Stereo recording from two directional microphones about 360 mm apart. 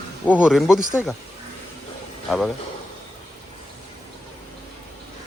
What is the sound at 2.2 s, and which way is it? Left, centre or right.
Speech, centre.